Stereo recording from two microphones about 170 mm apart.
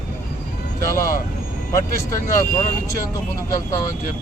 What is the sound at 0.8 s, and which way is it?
Speech, 15° left (ahead or behind).